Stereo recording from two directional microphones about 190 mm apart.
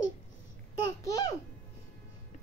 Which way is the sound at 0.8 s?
20° left (ahead or behind).